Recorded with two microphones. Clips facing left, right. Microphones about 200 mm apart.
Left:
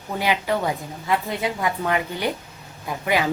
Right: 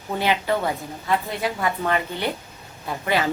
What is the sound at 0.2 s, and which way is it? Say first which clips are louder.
A woman's voice: even; 15° left (ahead or behind).